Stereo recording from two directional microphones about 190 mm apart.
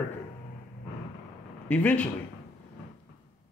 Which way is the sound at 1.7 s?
5° left (ahead or behind).